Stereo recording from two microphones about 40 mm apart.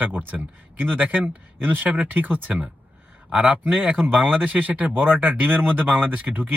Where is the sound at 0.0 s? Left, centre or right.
Right.